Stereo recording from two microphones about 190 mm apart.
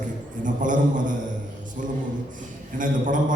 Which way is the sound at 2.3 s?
45° right (ahead or behind).